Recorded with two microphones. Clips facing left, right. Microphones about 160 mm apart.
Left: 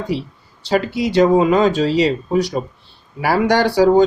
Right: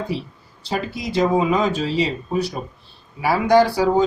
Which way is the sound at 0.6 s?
75° left (ahead or behind).